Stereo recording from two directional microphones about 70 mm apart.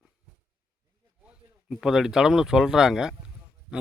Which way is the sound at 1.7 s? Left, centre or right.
Centre.